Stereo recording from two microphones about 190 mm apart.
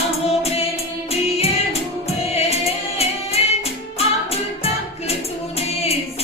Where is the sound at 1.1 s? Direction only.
35° left (ahead or behind).